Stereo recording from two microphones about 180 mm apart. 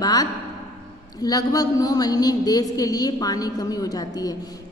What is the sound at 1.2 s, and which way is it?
A woman's voice, 20° left (ahead or behind).